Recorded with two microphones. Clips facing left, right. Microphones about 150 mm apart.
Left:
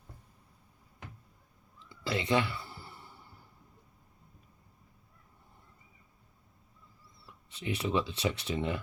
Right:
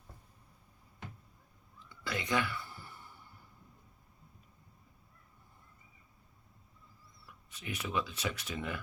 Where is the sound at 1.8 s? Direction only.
25° left (ahead or behind).